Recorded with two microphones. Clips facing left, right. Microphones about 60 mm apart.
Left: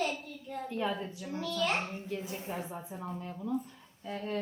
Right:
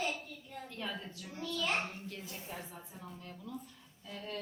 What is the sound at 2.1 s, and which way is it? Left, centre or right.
Speech, left.